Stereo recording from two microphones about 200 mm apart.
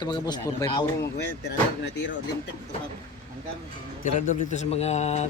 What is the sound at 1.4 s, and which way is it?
Speech, 60° left (ahead or behind).